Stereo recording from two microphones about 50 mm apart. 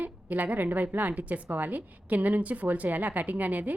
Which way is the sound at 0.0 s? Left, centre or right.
Right.